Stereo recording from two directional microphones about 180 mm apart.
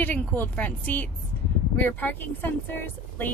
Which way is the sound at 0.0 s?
10° left (ahead or behind).